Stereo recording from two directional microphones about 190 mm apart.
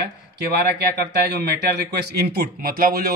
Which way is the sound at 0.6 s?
55° right (ahead or behind).